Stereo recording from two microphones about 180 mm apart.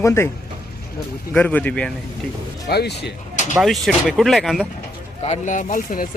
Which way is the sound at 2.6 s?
65° left (ahead or behind).